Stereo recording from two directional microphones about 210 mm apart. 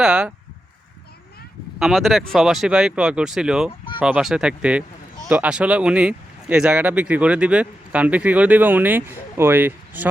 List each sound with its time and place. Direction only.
0.0 s speech: 5° right (ahead or behind)
1.8 s speech: centre (ahead or behind)